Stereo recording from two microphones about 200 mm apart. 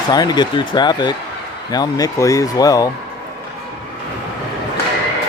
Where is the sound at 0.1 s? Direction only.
20° left (ahead or behind).